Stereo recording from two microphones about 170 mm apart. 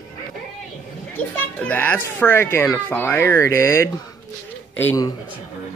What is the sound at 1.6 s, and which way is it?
Speech, 10° left (ahead or behind).